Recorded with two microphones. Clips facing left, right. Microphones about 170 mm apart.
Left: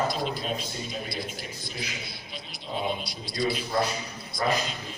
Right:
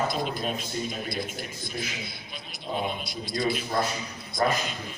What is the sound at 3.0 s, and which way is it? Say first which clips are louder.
Speech: even; 50° right (ahead or behind).